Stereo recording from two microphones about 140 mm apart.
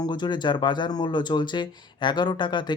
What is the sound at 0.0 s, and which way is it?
Speech, 30° left (ahead or behind).